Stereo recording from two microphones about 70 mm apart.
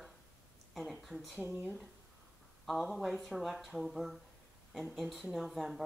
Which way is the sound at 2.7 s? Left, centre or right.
Centre.